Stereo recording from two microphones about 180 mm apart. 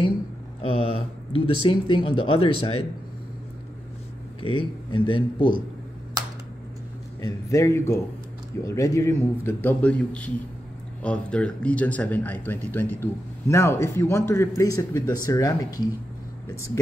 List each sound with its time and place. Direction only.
0.6 s speech: 30° left (ahead or behind)
4.4 s speech: 30° left (ahead or behind)
7.2 s speech: 20° left (ahead or behind)